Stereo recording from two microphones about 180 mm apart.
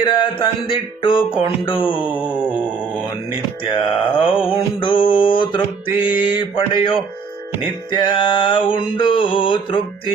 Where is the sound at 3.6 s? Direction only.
30° left (ahead or behind).